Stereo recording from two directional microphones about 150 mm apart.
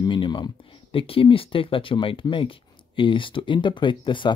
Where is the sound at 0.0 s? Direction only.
30° left (ahead or behind).